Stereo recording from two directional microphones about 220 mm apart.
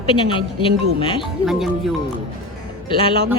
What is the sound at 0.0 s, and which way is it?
A woman's voice, 25° left (ahead or behind).